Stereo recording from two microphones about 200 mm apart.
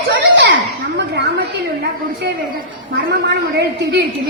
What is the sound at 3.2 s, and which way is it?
Speech, 55° right (ahead or behind).